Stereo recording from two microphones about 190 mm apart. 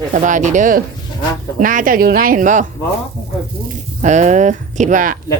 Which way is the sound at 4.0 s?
40° right (ahead or behind).